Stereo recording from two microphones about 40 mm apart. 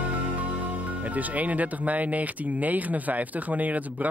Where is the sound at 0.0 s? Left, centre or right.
Right.